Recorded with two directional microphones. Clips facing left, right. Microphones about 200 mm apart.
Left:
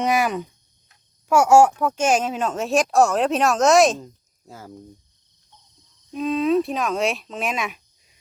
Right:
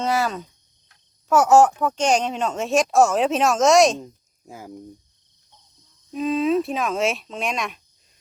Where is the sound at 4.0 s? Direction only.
15° right (ahead or behind).